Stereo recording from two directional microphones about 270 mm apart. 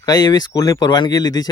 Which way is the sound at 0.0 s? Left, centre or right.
Centre.